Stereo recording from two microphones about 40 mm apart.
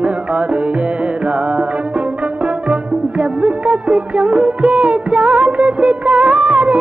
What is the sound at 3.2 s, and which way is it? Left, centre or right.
Music, right.